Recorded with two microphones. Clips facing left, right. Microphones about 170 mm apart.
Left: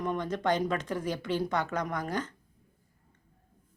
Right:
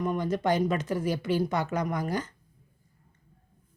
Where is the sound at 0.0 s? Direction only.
5° right (ahead or behind).